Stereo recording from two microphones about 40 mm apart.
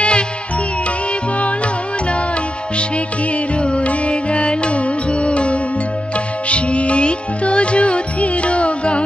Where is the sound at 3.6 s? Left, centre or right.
Left.